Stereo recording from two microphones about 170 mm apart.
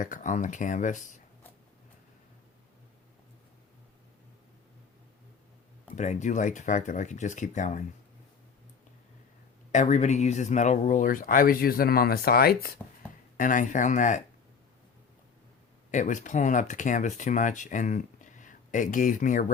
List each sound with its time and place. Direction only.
0.0 s speech: 50° left (ahead or behind)
6.0 s speech: 45° left (ahead or behind)
9.7 s speech: 45° left (ahead or behind); by 12.7 s 60° left (ahead or behind)
13.3 s speech: 50° left (ahead or behind)
15.9 s speech: 45° left (ahead or behind)